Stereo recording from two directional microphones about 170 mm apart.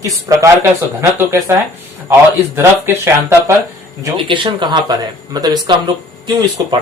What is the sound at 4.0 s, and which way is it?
Speech, 30° right (ahead or behind).